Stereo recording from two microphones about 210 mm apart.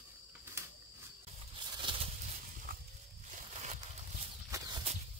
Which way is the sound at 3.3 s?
35° right (ahead or behind).